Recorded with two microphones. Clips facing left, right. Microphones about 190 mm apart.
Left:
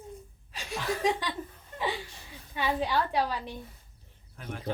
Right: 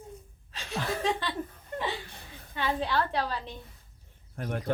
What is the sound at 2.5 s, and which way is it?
A woman's voice, 10° left (ahead or behind).